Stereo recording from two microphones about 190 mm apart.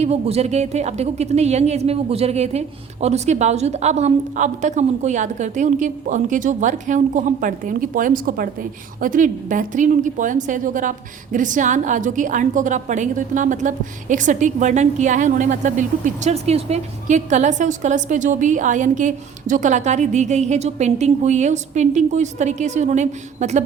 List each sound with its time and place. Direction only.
0.0 s a woman's voice: 35° right (ahead or behind)